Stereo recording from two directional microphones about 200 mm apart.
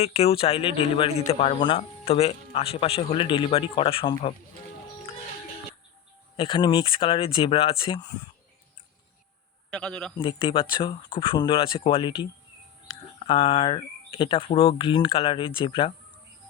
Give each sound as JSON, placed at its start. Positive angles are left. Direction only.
{"t": 0.0, "sound": "speech", "side_deg": 30}
{"t": 6.3, "sound": "speech", "side_deg": 25}
{"t": 9.6, "sound": "a man's voice", "side_deg": 5}
{"t": 10.2, "sound": "speech", "side_deg": 25}